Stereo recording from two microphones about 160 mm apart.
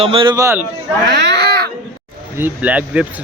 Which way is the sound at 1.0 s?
90° right.